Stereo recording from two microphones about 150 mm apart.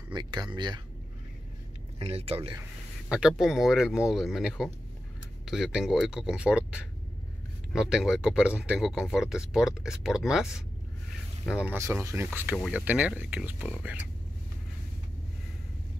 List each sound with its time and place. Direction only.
0.1 s speech: 30° right (ahead or behind)
2.0 s speech: 40° right (ahead or behind)
3.1 s speech: 5° right (ahead or behind)